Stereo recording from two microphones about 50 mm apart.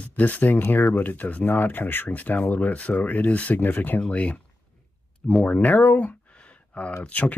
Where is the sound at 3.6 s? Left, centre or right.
Left.